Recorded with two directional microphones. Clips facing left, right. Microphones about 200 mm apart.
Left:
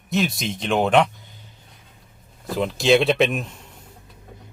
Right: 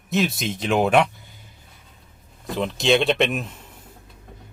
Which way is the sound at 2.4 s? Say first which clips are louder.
Left 2 dB; centre (ahead or behind).